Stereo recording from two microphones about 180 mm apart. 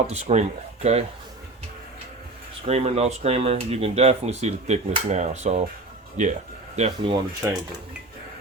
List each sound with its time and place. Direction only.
0.1 s speech: 40° right (ahead or behind)
2.6 s speech: 35° right (ahead or behind)
7.4 s speech: 15° right (ahead or behind)